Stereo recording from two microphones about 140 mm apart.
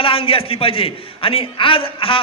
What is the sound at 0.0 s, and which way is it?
A man's voice, 40° left (ahead or behind).